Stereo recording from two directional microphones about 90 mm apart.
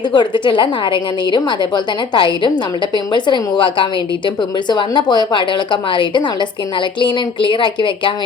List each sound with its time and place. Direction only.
0.1 s a woman's voice: 60° left (ahead or behind)